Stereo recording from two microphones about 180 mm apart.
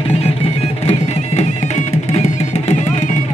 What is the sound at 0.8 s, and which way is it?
Music, 35° left (ahead or behind).